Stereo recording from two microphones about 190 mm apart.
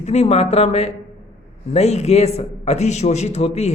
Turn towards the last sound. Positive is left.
turn(degrees=35)  # may be behind; listen again after turning